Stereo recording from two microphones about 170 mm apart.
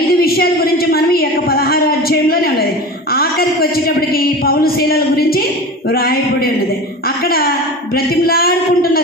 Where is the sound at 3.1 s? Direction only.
65° left (ahead or behind).